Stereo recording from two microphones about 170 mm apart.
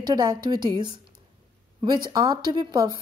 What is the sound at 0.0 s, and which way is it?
Speech, 25° right (ahead or behind).